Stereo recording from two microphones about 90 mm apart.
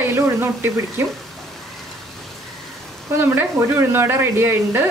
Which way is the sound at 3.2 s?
25° right (ahead or behind).